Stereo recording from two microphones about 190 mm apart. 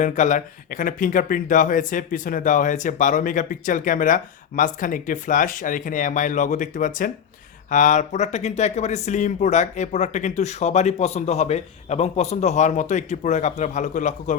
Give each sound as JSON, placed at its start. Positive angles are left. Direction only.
{"t": 0.0, "sound": "speech", "side_deg": 40}